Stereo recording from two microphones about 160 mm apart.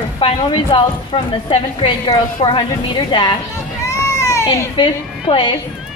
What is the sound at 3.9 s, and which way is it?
Children playing, 20° left (ahead or behind).